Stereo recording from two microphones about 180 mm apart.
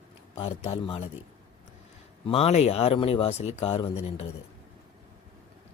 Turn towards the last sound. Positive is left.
turn(degrees=35)  # may be behind; listen again after turning